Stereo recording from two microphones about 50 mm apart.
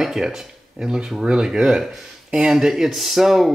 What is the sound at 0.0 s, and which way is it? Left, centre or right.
Speech, centre.